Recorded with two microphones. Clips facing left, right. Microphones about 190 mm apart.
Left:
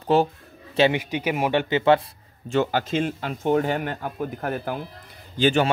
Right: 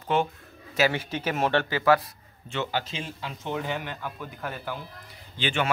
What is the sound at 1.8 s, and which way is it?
Speech, 25° left (ahead or behind).